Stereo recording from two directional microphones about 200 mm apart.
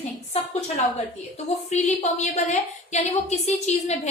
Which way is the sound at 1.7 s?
35° left (ahead or behind).